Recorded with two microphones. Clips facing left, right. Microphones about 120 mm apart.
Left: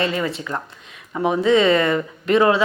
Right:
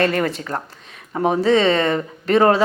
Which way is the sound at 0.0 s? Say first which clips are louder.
Right 3 dB; 55° right (ahead or behind).